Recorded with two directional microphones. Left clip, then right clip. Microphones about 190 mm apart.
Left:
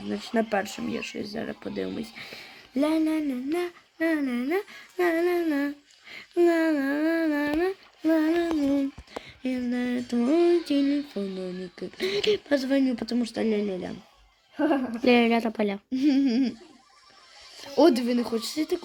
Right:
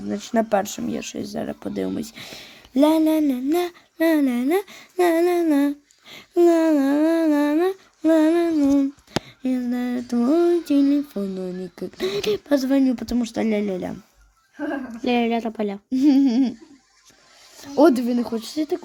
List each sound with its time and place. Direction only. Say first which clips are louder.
0.1 s speech: right 6 dB; 40° right (ahead or behind)
15.0 s a woman's voice: even; centre (ahead or behind)
15.9 s speech: right 8 dB; 40° right (ahead or behind)
17.6 s speech: right 4 dB; 40° right (ahead or behind)